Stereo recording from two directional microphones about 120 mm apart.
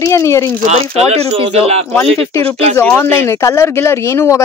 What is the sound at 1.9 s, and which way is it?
Speech, 25° left (ahead or behind).